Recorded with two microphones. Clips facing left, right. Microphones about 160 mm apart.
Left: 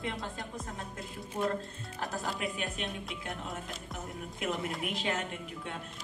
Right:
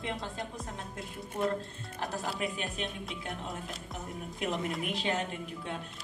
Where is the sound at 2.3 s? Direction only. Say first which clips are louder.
Right 1 dB; centre (ahead or behind).